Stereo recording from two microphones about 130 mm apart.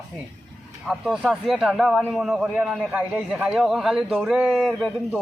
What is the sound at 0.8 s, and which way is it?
A man's voice, centre (ahead or behind).